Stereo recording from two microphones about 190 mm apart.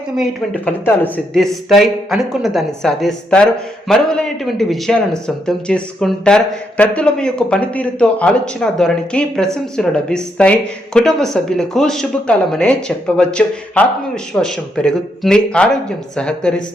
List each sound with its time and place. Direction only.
0.2 s speech: 10° left (ahead or behind)